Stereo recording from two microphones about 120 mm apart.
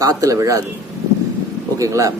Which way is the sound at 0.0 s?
30° right (ahead or behind).